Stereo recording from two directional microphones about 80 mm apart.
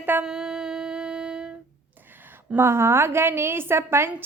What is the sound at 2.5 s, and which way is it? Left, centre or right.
A woman's voice, right.